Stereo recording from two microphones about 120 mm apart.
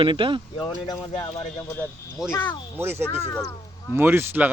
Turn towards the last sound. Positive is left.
turn(degrees=-15)  # may be behind; listen again after turning